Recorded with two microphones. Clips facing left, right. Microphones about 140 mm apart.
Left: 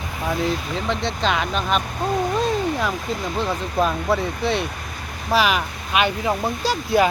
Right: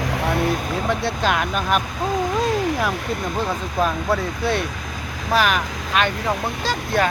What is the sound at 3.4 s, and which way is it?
Speech, centre (ahead or behind).